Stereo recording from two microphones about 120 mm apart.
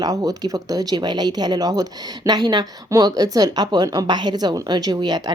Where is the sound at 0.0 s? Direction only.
30° right (ahead or behind).